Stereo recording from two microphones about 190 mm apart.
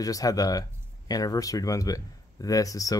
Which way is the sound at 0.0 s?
20° left (ahead or behind).